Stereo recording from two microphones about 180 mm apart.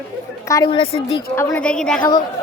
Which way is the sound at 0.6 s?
30° left (ahead or behind).